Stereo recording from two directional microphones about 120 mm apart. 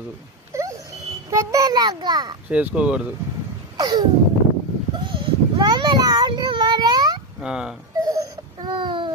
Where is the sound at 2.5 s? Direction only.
10° right (ahead or behind).